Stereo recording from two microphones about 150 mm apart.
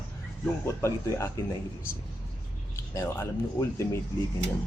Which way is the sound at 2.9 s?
20° left (ahead or behind).